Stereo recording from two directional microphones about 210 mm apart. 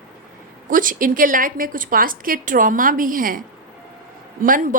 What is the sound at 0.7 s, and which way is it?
A woman's voice, 40° right (ahead or behind).